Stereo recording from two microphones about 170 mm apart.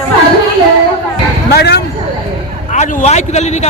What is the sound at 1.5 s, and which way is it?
Speech, 75° left (ahead or behind).